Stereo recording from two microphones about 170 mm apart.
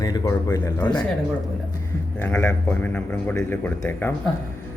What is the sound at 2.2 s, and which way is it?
A man's voice, 5° left (ahead or behind).